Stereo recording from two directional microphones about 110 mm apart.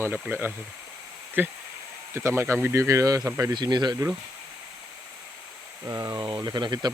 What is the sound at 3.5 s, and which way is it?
Speech, 40° right (ahead or behind).